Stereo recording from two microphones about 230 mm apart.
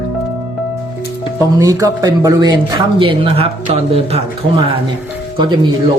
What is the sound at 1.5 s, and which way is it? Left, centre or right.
Speech, centre.